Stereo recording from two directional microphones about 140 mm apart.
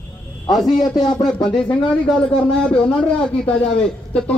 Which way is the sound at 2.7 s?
5° left (ahead or behind).